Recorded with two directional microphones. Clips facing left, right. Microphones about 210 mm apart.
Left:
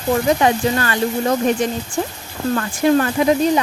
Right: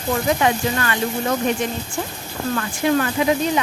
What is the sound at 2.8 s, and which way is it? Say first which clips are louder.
Speech: left 4 dB; 40° left (ahead or behind).